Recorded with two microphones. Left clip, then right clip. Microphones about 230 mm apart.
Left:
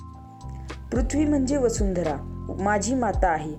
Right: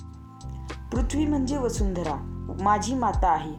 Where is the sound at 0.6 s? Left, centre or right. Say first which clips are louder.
Left 3 dB; centre.